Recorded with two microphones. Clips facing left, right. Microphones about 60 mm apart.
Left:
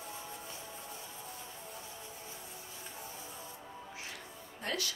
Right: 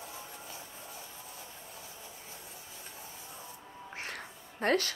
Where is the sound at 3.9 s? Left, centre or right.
Right.